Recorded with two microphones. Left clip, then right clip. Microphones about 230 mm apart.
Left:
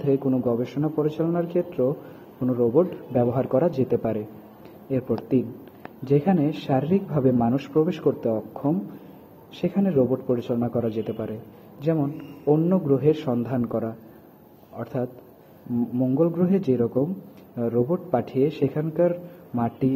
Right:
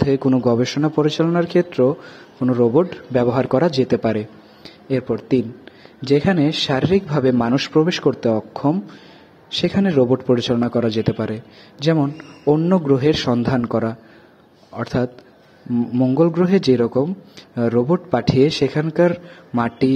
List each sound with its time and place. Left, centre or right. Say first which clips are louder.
0.1 s a man's voice: right 3 dB; right
6.0 s a man's voice: right 5 dB; right